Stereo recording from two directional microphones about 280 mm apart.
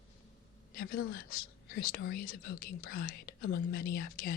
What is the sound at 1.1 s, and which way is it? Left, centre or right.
Speech, left.